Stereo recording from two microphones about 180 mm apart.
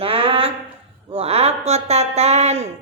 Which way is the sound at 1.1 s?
35° right (ahead or behind).